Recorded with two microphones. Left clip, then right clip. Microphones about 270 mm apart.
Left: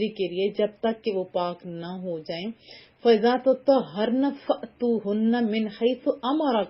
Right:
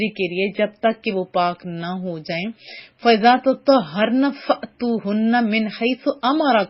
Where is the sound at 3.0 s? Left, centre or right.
Right.